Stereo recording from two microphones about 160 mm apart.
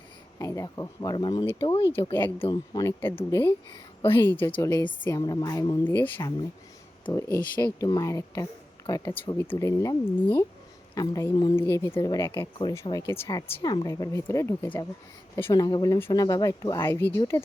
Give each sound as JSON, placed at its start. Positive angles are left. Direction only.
{"t": 0.3, "sound": "speech", "side_deg": 20}
{"t": 5.8, "sound": "speech", "side_deg": 10}